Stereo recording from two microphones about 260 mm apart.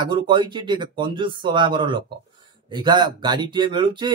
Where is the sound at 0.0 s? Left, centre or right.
Centre.